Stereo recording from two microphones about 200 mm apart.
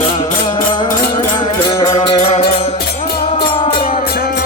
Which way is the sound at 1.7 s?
25° left (ahead or behind).